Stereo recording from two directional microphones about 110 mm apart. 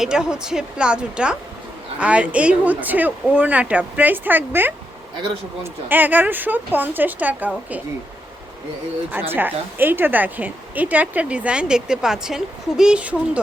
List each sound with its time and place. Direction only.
0.0 s a woman's voice: 5° right (ahead or behind)
5.9 s a woman's voice: 15° right (ahead or behind)
9.3 s a woman's voice: 20° right (ahead or behind)